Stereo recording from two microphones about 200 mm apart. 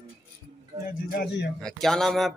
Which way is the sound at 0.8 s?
50° left (ahead or behind).